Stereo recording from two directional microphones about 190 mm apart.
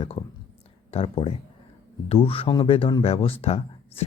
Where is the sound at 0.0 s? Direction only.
30° left (ahead or behind).